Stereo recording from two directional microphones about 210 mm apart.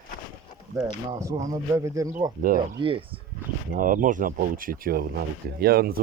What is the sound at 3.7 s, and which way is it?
Speech, 40° right (ahead or behind).